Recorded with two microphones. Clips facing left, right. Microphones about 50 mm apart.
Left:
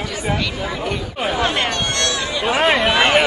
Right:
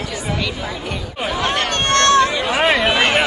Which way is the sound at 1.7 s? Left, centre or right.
Right.